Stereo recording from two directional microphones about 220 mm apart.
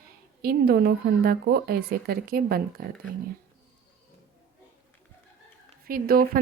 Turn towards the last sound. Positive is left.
turn(degrees=-40)  # may be behind; listen again after turning